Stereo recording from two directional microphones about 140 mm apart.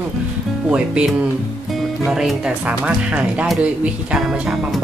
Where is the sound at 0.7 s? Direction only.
5° right (ahead or behind).